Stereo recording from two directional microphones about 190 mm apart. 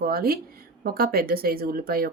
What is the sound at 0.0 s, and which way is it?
Speech, 50° right (ahead or behind).